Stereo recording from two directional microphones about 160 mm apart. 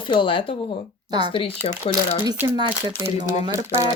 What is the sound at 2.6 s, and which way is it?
Speech, 30° right (ahead or behind).